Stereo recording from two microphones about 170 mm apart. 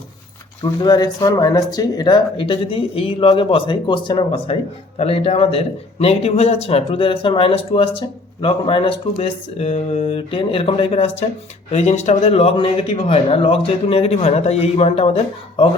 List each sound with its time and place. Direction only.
0.6 s speech: 25° left (ahead or behind)